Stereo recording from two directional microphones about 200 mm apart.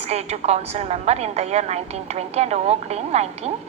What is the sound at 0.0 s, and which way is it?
A woman's voice, 30° right (ahead or behind).